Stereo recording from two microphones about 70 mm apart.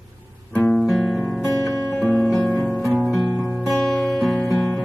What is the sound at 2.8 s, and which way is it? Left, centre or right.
Music, right.